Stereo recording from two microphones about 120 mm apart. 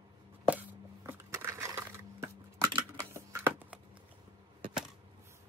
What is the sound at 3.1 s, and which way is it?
Computer keyboard, 20° right (ahead or behind).